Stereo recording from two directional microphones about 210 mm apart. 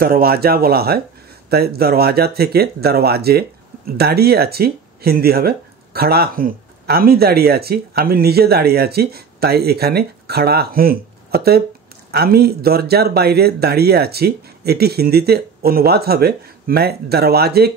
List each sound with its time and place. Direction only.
0.0 s speech: 45° right (ahead or behind)